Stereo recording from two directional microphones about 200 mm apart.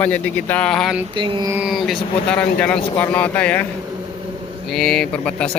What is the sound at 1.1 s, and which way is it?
Mantra, 25° right (ahead or behind).